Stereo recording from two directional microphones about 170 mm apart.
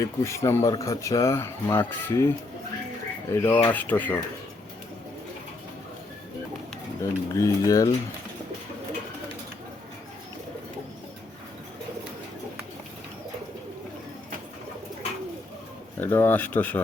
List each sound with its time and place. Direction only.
0.0 s speech: 15° left (ahead or behind)
7.0 s speech: 20° left (ahead or behind)
16.0 s speech: 10° left (ahead or behind)